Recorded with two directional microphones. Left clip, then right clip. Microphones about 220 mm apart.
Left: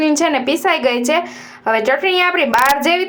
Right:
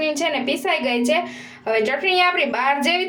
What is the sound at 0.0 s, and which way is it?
A woman's voice, 20° left (ahead or behind).